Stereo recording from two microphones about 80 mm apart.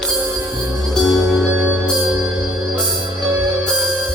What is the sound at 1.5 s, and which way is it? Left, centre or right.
Music, right.